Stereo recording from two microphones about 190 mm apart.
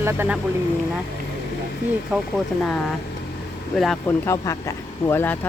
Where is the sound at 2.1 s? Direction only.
10° right (ahead or behind).